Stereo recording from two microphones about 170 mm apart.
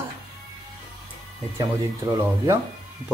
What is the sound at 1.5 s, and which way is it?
Speech, 20° right (ahead or behind).